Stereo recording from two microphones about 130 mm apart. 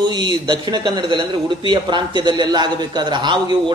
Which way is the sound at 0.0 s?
35° right (ahead or behind).